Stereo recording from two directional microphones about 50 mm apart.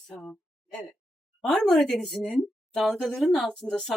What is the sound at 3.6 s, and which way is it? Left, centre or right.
Speech, left.